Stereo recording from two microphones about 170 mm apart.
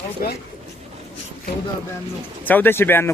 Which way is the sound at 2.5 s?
10° left (ahead or behind).